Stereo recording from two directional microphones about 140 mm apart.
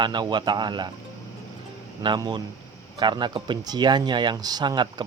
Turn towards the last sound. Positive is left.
turn(degrees=-30)  # may be behind; listen again after turning